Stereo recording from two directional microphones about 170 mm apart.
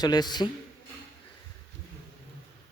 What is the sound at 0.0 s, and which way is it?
Speech, 25° left (ahead or behind).